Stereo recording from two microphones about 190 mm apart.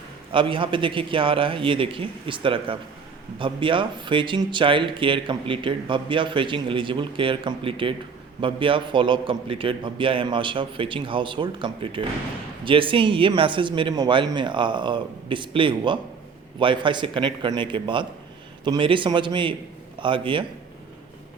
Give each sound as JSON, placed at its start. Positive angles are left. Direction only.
{"t": 0.3, "sound": "speech", "side_deg": -25}